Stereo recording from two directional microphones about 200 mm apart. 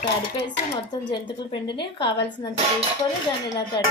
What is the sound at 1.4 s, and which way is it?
Speech, 25° left (ahead or behind).